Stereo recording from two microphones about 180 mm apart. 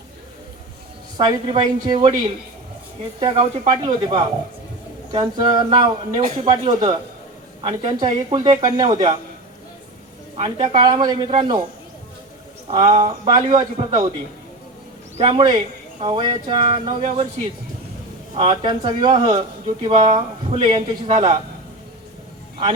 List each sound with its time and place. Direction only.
1.1 s speech: 25° right (ahead or behind)
6.2 s speech: 40° right (ahead or behind)
6.5 s speech: 25° right (ahead or behind)
10.3 s speech: 30° right (ahead or behind)
12.6 s a sound: 30° right (ahead or behind)
13.0 s speech: 30° right (ahead or behind)
15.2 s speech: 30° right (ahead or behind)